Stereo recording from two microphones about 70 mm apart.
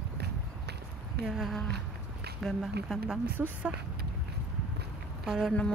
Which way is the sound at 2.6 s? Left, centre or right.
Centre.